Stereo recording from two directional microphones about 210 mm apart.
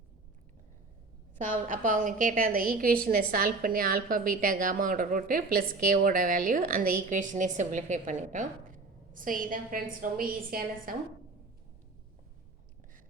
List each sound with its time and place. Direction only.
1.4 s a woman's voice: 40° right (ahead or behind)